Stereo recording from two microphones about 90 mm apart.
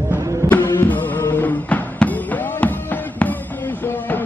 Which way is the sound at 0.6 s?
20° left (ahead or behind).